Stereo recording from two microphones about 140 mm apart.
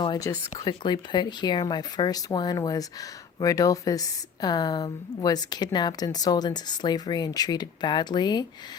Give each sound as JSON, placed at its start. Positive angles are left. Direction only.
{"t": 0.0, "sound": "a woman's voice", "side_deg": 30}